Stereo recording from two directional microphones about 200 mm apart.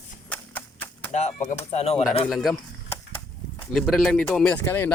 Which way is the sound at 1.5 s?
30° left (ahead or behind).